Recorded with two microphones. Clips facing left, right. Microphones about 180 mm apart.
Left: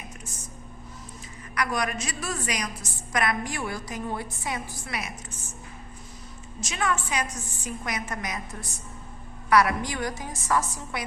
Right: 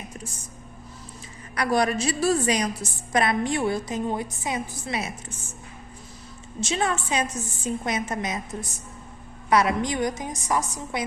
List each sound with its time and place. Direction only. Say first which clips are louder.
1.5 s a woman's voice: right 6 dB; 30° right (ahead or behind)
6.6 s a woman's voice: right 3 dB; 30° right (ahead or behind)
9.5 s a woman's voice: right 1 dB; 20° right (ahead or behind)